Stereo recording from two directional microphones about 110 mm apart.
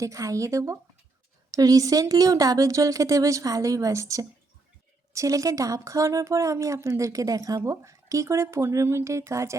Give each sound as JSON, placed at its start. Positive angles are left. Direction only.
{"t": 0.0, "sound": "a woman's voice", "side_deg": -30}